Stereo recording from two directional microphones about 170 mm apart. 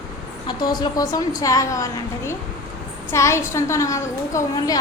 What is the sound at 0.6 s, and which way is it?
A woman's voice, 25° left (ahead or behind).